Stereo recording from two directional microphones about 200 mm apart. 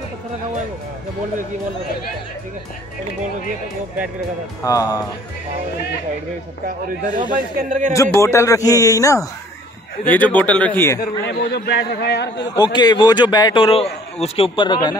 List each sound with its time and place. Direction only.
4.6 s a man's voice: 15° left (ahead or behind)
7.5 s speech: 40° right (ahead or behind)
7.9 s a man's voice: 15° left (ahead or behind)
11.2 s a man's voice: 55° left (ahead or behind)
12.4 s a man's voice: 20° left (ahead or behind)